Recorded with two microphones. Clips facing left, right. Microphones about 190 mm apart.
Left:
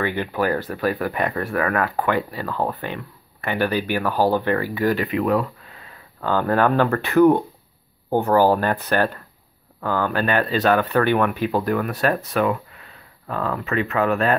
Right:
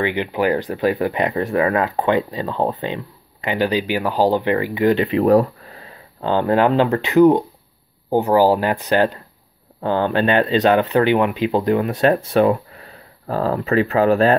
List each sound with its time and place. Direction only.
0.0 s speech: 20° right (ahead or behind)